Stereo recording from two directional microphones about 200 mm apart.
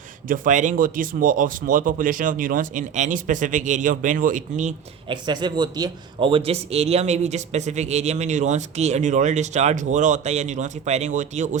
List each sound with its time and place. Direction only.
0.3 s a man's voice: 40° right (ahead or behind)
5.0 s a man's voice: 20° right (ahead or behind)